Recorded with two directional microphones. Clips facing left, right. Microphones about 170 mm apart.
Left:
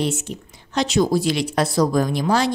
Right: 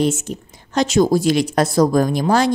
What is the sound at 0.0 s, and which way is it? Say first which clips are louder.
Speech: right 5 dB; 45° right (ahead or behind).